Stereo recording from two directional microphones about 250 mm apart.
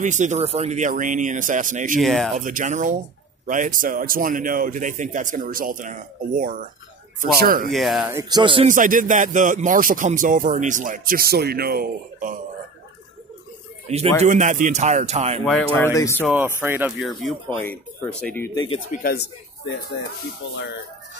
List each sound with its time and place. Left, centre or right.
0.0 s speech: right
2.0 s speech: centre
2.3 s a man's voice: right
7.7 s a man's voice: centre; by 12.4 s right
13.9 s speech: right
15.4 s speech: centre
16.3 s speech: centre
18.9 s speech: left